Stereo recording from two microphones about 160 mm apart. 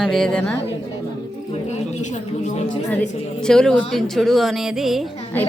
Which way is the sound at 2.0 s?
45° left (ahead or behind).